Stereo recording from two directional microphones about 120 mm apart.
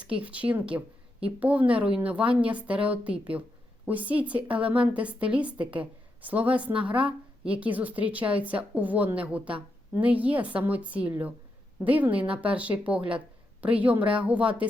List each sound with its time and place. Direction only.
0.1 s a woman's voice: 10° right (ahead or behind)